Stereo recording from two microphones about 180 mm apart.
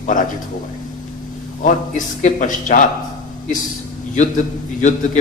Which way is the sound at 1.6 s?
45° left (ahead or behind).